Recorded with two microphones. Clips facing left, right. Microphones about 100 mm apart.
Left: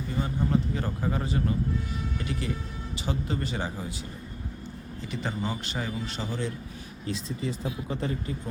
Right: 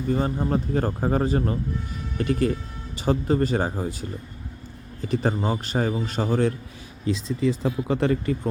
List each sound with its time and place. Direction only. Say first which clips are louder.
0.1 s a man's voice: right 4 dB; 45° right (ahead or behind)
5.0 s a man's voice: right 8 dB; 45° right (ahead or behind)
7.6 s speech: right 8 dB; 80° right